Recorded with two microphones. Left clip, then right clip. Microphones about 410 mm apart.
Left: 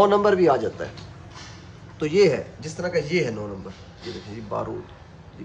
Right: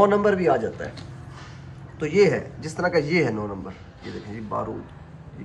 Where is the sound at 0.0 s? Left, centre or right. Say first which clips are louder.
Left 1 dB; centre.